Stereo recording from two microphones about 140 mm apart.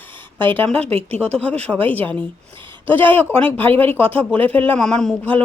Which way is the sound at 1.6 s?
10° left (ahead or behind).